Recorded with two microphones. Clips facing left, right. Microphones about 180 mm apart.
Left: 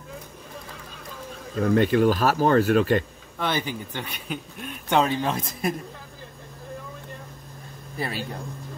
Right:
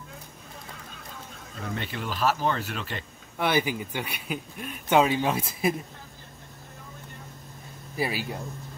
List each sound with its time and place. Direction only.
1.5 s speech: 55° left (ahead or behind)
3.3 s speech: 10° right (ahead or behind)
8.0 s speech: 5° right (ahead or behind)